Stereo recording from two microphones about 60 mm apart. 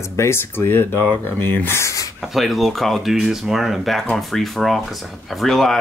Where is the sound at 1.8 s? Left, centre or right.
Left.